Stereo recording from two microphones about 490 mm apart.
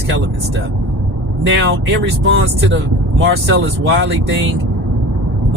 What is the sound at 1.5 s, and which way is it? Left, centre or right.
Speech, right.